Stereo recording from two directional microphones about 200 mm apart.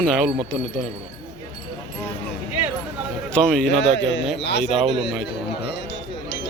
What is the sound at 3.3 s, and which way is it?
Speech, 5° left (ahead or behind).